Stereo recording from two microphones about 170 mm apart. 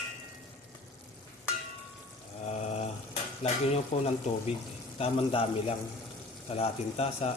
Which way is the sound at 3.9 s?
35° left (ahead or behind).